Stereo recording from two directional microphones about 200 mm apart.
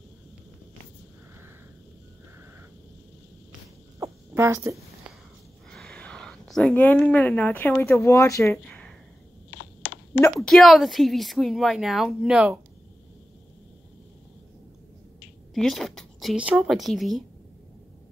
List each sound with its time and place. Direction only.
4.0 s a sound: 15° right (ahead or behind)
5.7 s speech: 5° left (ahead or behind)
10.4 s a woman's voice: centre (ahead or behind)
15.5 s speech: centre (ahead or behind)